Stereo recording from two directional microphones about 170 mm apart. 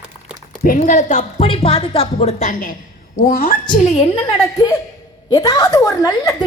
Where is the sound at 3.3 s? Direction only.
60° left (ahead or behind).